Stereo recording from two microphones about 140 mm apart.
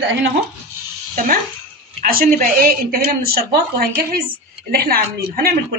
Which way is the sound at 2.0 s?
85° right.